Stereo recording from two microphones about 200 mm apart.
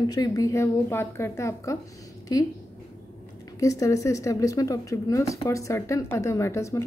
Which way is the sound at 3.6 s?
15° left (ahead or behind).